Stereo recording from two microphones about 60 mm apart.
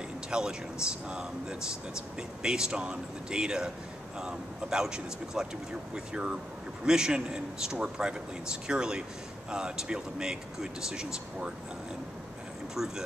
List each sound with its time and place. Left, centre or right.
0.3 s speech: centre
12.7 s speech: centre